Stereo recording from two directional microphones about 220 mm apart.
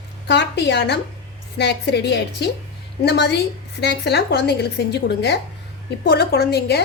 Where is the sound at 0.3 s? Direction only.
50° left (ahead or behind).